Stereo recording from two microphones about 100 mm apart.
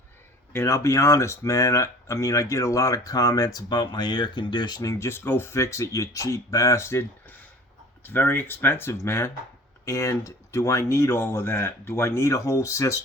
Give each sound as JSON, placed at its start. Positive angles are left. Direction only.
{"t": 0.5, "sound": "speech", "side_deg": 30}